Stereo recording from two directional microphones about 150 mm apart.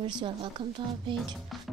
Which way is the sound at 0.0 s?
35° right (ahead or behind).